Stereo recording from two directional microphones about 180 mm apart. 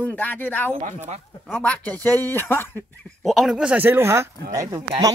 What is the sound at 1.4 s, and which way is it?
Speech, 5° left (ahead or behind).